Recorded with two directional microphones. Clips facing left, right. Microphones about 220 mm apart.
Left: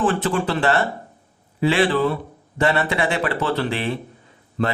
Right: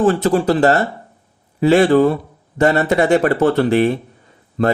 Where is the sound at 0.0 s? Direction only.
40° right (ahead or behind).